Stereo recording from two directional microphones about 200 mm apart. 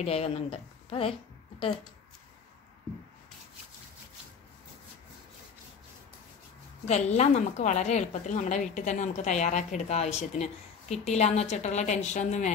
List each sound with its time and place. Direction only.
0.0 s a woman's voice: 30° left (ahead or behind)
6.9 s a woman's voice: 35° left (ahead or behind)